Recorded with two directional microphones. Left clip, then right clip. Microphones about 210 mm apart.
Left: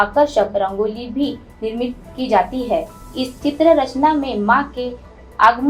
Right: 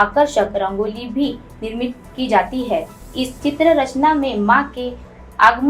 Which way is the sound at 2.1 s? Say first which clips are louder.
Even; 20° right (ahead or behind).